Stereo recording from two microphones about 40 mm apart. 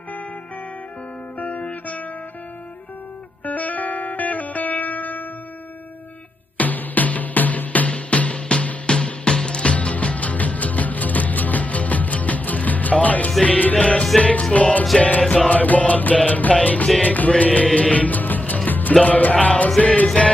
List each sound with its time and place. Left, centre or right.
1.4 s music: left
3.4 s music: left
6.6 s music: left
7.9 s music: left
15.5 s music: left
17.3 s music: left
19.8 s music: left